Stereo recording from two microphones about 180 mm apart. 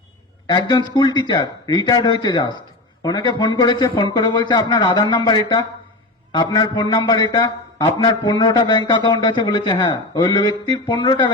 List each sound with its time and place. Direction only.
0.4 s a man's voice: 25° left (ahead or behind)